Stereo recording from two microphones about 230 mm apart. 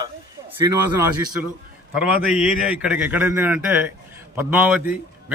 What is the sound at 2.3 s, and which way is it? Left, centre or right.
A man's voice, centre.